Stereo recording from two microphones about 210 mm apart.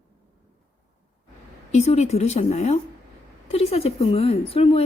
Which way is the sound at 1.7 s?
30° left (ahead or behind).